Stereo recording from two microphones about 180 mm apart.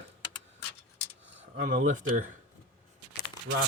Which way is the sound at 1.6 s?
45° right (ahead or behind).